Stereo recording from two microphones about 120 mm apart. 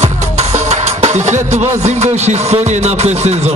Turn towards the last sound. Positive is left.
turn(degrees=-65)  # may be behind; listen again after turning